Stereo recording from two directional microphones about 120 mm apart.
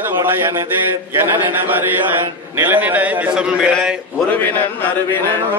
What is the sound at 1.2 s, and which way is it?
Mantra, 15° right (ahead or behind).